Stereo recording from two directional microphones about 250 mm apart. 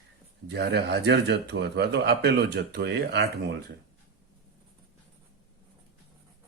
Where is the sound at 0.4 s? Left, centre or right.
Right.